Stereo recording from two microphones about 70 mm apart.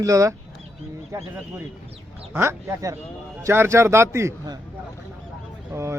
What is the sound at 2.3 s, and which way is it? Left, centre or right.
A man's voice, right.